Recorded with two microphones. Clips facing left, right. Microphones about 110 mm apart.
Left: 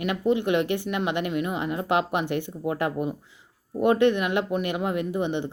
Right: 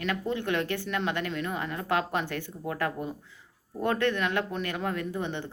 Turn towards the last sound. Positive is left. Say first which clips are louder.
# left 6 dB
turn(degrees=15)  # may be behind; listen again after turning